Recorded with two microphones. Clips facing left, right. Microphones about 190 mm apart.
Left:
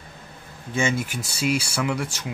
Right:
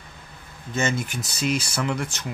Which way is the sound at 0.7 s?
10° left (ahead or behind).